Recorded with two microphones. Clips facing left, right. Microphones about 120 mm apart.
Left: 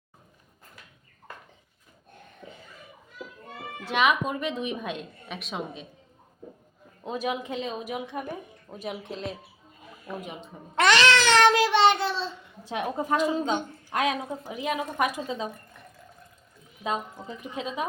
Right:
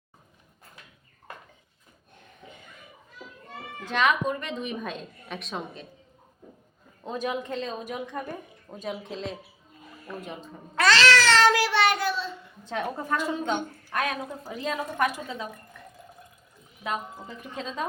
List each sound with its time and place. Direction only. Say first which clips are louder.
3.8 s speech: even; 10° left (ahead or behind)
7.0 s speech: even; 10° left (ahead or behind); by 12.3 s 30° left (ahead or behind)
12.6 s speech: left 2 dB; 15° left (ahead or behind)
16.8 s speech: left 2 dB; 20° left (ahead or behind)